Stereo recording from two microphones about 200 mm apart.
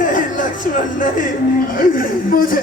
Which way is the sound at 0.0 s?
40° left (ahead or behind).